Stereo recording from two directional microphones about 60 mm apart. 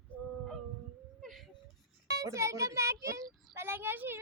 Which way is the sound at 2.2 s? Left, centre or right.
Right.